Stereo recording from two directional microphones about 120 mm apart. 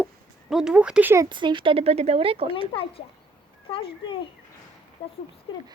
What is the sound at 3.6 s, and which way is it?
A child's voice, 50° left (ahead or behind).